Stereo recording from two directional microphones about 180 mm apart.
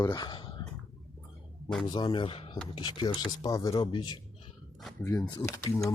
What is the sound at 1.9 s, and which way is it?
Speech, 25° left (ahead or behind).